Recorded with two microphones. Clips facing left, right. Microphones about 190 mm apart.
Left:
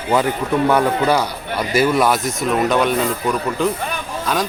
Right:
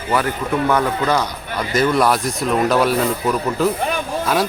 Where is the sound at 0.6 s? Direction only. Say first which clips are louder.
Left 3 dB; 10° left (ahead or behind).